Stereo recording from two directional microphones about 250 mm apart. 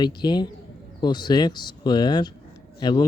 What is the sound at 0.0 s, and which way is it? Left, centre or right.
Speech, centre.